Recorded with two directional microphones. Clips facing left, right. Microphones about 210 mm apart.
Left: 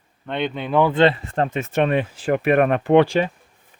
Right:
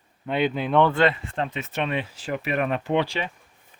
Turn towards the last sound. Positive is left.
turn(degrees=50)  # may be behind; listen again after turning